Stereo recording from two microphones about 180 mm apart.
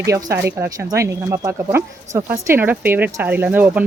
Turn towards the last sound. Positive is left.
turn(degrees=-10)  # may be behind; listen again after turning